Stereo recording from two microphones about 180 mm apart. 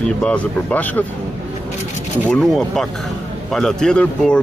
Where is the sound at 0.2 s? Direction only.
5° left (ahead or behind).